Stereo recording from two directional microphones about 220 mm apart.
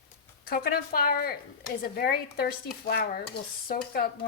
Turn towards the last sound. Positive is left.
turn(degrees=40)  # may be behind; listen again after turning